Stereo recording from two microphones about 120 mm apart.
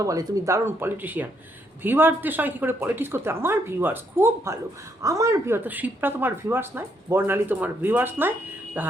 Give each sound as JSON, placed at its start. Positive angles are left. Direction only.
{"t": 0.0, "sound": "speech", "side_deg": -30}
{"t": 5.6, "sound": "speech", "side_deg": -15}